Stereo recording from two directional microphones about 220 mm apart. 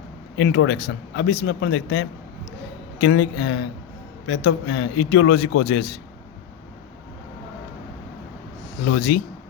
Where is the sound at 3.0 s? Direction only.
60° left (ahead or behind).